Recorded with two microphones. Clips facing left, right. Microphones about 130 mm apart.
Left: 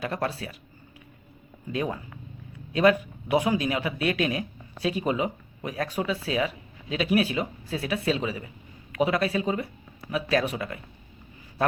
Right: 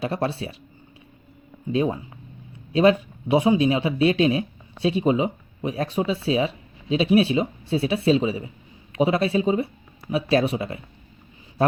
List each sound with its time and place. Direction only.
0.0 s speech: 30° right (ahead or behind)
1.7 s speech: 25° right (ahead or behind)